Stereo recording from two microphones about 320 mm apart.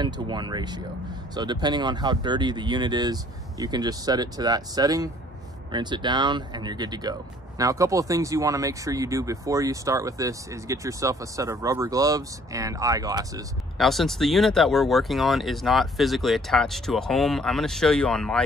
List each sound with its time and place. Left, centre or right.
0.0 s speech: centre
13.7 s speech: centre